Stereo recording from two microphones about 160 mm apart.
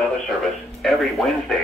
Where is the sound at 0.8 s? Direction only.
Centre (ahead or behind).